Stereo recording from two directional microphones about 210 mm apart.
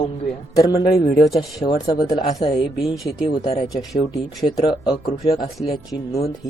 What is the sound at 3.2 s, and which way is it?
Speech, 30° left (ahead or behind).